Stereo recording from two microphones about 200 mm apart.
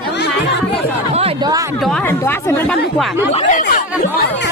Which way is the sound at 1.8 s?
5° left (ahead or behind).